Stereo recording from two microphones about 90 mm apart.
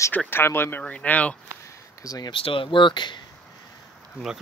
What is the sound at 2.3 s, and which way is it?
Speech, 75° left (ahead or behind).